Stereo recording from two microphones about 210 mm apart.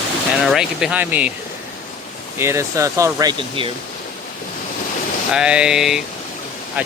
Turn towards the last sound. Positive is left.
turn(degrees=-5)  # may be behind; listen again after turning